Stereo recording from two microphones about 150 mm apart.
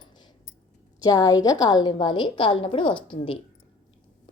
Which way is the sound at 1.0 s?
25° left (ahead or behind).